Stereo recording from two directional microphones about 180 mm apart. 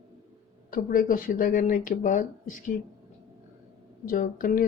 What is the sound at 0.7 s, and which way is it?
Speech, 50° left (ahead or behind).